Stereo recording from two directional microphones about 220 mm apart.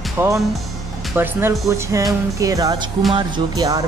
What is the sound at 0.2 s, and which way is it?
Speech, 10° right (ahead or behind).